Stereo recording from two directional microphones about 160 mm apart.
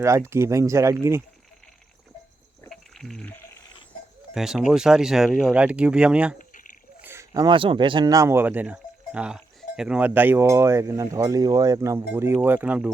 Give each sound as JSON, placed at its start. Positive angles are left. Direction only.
{"t": 0.0, "sound": "speech", "side_deg": -20}
{"t": 2.6, "sound": "frog", "side_deg": 5}
{"t": 4.4, "sound": "speech", "side_deg": 0}
{"t": 6.5, "sound": "a sound", "side_deg": 55}
{"t": 7.0, "sound": "speech", "side_deg": -15}